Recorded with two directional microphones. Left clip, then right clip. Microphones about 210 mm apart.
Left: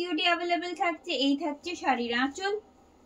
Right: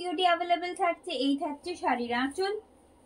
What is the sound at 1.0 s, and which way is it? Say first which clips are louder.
A woman's voice: left 2 dB; 15° left (ahead or behind).